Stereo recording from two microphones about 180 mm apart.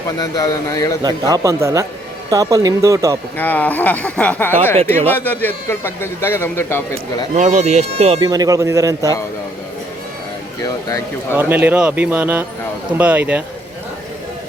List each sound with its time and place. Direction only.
0.2 s a man's voice: 20° left (ahead or behind)
1.0 s speech: 20° right (ahead or behind)
3.3 s a man's voice: 10° left (ahead or behind)
7.3 s speech: 40° right (ahead or behind)
8.2 s a man's voice: 20° right (ahead or behind)
10.6 s a man's voice: 15° left (ahead or behind)
11.3 s speech: 10° right (ahead or behind)